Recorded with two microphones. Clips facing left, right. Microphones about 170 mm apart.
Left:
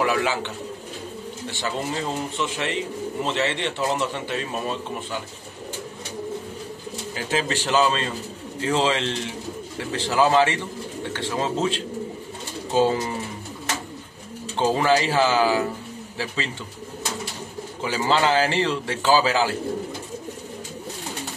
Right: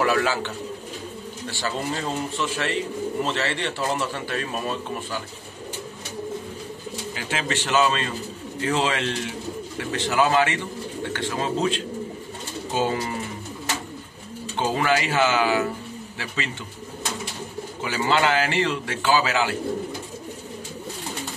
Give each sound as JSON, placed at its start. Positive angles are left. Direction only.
{"t": 0.0, "sound": "a man's voice", "side_deg": 15}
{"t": 1.5, "sound": "a man's voice", "side_deg": 20}
{"t": 7.2, "sound": "a man's voice", "side_deg": 35}
{"t": 14.6, "sound": "a man's voice", "side_deg": 35}
{"t": 17.8, "sound": "a man's voice", "side_deg": 30}